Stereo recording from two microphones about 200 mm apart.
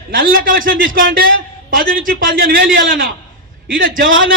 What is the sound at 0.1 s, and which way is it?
A man's voice, 45° right (ahead or behind).